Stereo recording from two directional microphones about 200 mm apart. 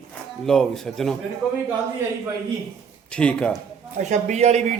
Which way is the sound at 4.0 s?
35° right (ahead or behind).